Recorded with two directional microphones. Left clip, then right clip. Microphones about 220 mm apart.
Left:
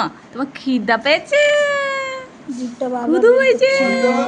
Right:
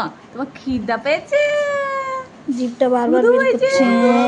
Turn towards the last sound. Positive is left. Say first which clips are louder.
# even
turn(degrees=15)  # may be behind; listen again after turning